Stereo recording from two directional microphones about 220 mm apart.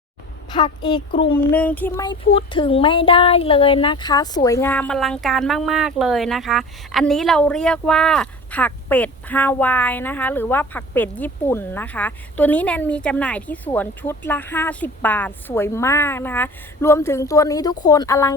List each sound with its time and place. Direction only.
0.5 s a woman's voice: 20° left (ahead or behind)
1.5 s speech: 5° left (ahead or behind)
2.0 s speech: 20° left (ahead or behind)